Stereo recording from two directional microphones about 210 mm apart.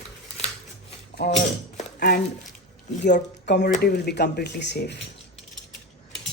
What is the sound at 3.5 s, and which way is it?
Speech, 55° left (ahead or behind).